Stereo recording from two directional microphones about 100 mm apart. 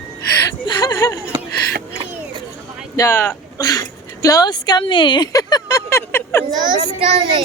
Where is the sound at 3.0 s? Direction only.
30° left (ahead or behind); by 5.3 s 50° left (ahead or behind).